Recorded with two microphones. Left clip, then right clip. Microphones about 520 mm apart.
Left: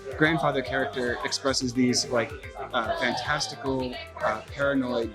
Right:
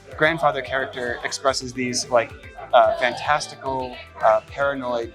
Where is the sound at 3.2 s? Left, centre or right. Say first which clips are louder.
Right 7 dB; right.